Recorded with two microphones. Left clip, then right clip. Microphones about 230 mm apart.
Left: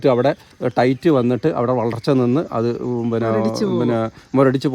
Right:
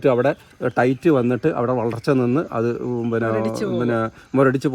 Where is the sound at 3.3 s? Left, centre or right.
Left.